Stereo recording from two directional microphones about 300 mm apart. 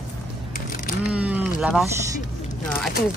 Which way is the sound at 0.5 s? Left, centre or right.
Left.